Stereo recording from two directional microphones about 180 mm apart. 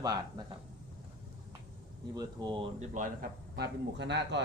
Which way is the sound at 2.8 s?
45° right (ahead or behind).